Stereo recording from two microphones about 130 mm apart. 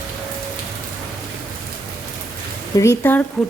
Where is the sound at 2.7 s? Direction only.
20° left (ahead or behind).